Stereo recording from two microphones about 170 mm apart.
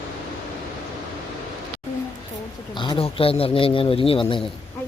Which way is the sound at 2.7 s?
30° left (ahead or behind).